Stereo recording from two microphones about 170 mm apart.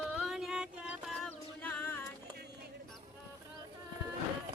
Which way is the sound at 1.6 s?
10° left (ahead or behind).